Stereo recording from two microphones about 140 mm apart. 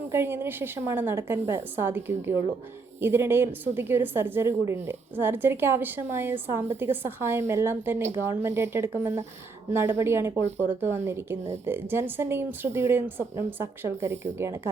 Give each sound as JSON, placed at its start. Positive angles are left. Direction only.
{"t": 0.1, "sound": "a woman's voice", "side_deg": -15}